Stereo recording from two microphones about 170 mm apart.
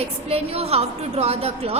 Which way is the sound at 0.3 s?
35° right (ahead or behind).